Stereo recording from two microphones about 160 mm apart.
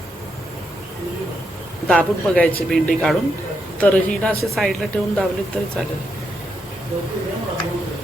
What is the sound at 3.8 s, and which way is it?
A woman's voice, 10° left (ahead or behind).